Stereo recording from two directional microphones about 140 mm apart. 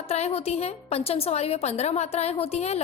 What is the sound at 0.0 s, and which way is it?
A woman's voice, 50° left (ahead or behind).